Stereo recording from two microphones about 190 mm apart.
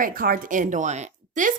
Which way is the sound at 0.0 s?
50° right (ahead or behind).